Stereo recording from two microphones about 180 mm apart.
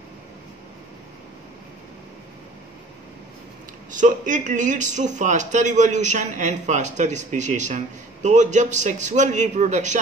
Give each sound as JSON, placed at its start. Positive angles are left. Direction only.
{"t": 3.9, "sound": "speech", "side_deg": -45}